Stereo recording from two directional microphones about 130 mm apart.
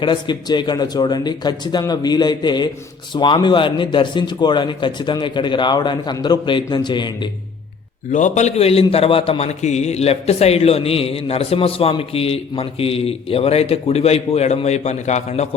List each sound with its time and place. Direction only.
0.0 s speech: 35° left (ahead or behind)
8.1 s a man's voice: 65° left (ahead or behind)